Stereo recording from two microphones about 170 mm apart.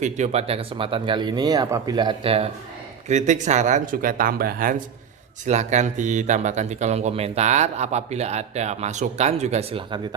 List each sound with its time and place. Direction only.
0.0 s speech: 40° right (ahead or behind)
5.5 s speech: 45° right (ahead or behind)